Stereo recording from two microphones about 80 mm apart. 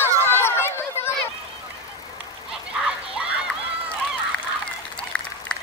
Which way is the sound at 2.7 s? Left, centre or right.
Centre.